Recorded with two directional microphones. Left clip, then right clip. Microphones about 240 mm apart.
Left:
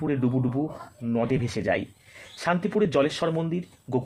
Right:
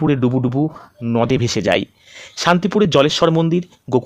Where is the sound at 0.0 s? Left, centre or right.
Right.